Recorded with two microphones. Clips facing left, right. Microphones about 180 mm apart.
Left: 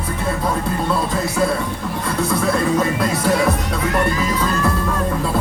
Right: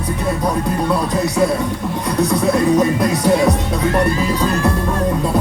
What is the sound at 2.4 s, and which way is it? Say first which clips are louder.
Music: right 4 dB; 20° right (ahead or behind).